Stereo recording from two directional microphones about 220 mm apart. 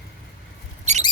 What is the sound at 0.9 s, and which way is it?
Mouse, 30° right (ahead or behind).